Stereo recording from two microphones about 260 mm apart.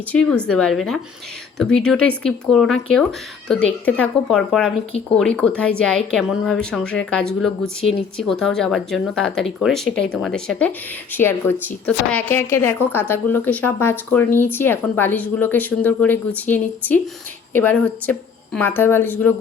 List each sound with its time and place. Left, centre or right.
0.4 s speech: centre